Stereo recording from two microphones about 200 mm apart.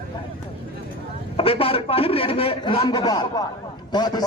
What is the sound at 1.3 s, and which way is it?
A man's voice, 25° left (ahead or behind).